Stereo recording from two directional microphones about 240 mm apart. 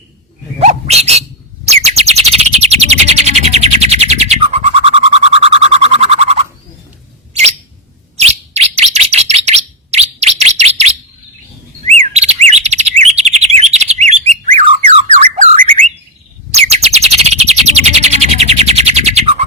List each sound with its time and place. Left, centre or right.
0.6 s bird: right
8.1 s bird: right
14.4 s squawk: right
16.5 s bird: right